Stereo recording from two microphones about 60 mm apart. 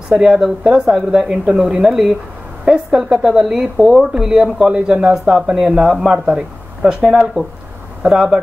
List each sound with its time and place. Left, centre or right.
0.1 s speech: centre
3.7 s speech: centre
4.1 s speech: centre
8.1 s speech: centre